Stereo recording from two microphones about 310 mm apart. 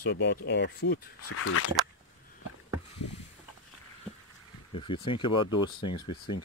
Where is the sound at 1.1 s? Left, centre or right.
Left.